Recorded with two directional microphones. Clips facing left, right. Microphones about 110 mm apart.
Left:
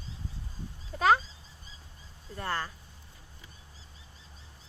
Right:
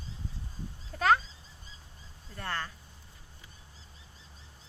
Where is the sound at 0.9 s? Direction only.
10° left (ahead or behind).